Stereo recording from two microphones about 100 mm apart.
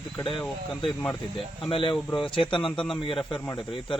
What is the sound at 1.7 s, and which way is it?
Speech, 60° left (ahead or behind).